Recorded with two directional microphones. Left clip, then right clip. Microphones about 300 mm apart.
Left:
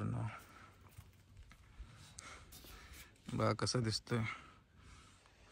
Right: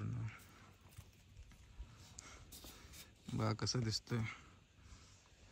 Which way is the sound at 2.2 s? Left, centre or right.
Centre.